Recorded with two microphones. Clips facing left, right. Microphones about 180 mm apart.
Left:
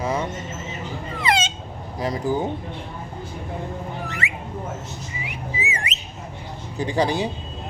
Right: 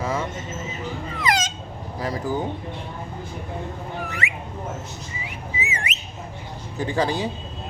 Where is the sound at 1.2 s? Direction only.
25° left (ahead or behind).